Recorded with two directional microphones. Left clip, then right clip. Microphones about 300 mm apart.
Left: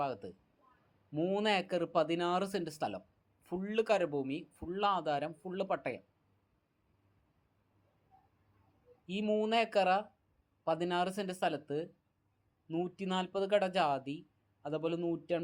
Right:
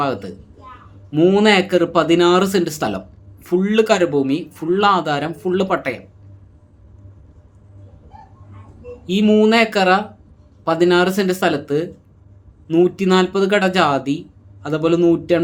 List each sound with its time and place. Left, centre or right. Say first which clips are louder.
0.0 s speech: right 16 dB; centre
9.0 s speech: right 19 dB; centre